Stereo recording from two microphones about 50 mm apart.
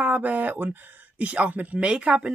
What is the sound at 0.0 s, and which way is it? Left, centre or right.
Speech, right.